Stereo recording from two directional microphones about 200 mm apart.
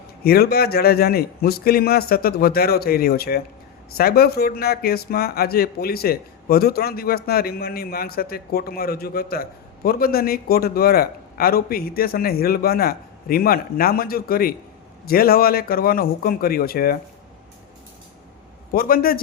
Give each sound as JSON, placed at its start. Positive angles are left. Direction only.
{"t": 0.3, "sound": "a man's voice", "side_deg": 50}
{"t": 18.7, "sound": "a man's voice", "side_deg": 45}